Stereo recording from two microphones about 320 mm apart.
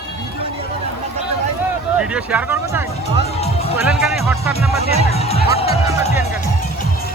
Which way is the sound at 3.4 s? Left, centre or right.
Centre.